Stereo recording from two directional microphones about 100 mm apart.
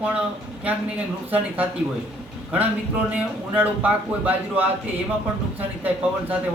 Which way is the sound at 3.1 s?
15° right (ahead or behind).